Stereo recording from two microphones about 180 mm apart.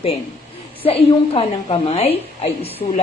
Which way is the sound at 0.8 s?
30° left (ahead or behind).